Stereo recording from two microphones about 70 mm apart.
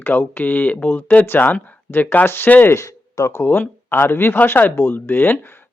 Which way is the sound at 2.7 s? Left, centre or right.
Left.